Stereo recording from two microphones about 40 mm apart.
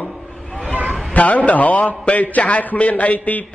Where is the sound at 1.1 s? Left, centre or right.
Left.